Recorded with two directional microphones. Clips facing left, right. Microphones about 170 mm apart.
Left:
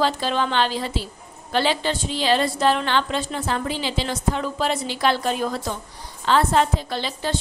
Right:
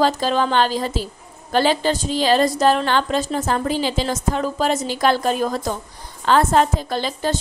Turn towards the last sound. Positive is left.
turn(degrees=-45)  # may be behind; listen again after turning